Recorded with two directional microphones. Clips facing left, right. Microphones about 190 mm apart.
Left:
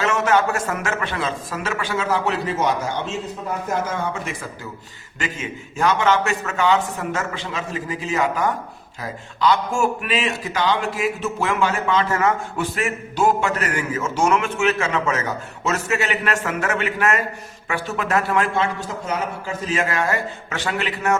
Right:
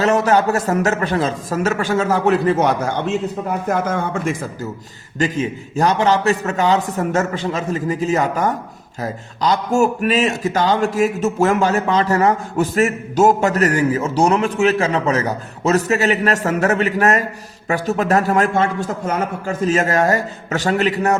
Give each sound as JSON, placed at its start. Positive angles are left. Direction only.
{"t": 0.0, "sound": "a man's voice", "side_deg": -35}